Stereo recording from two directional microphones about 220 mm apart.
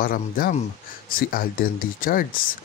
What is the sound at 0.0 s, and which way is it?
Speech, 40° left (ahead or behind).